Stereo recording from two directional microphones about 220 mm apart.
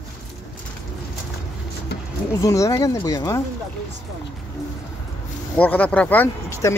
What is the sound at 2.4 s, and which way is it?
Speech, 15° left (ahead or behind).